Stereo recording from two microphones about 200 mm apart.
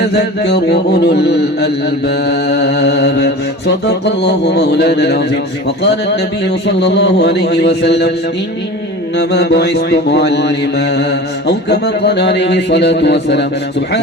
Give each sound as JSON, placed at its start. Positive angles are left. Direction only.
{"t": 0.0, "sound": "mantra", "side_deg": 55}
{"t": 9.1, "sound": "mantra", "side_deg": 60}